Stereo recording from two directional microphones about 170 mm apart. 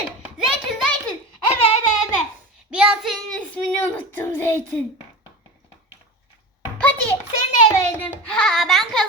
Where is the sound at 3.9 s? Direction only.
10° left (ahead or behind).